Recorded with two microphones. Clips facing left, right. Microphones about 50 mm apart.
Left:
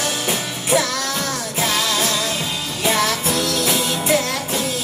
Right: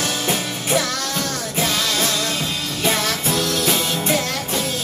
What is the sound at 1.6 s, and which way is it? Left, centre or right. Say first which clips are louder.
Music: left 1 dB; centre.